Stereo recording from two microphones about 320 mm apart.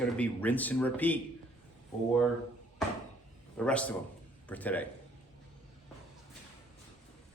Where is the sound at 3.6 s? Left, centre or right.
Centre.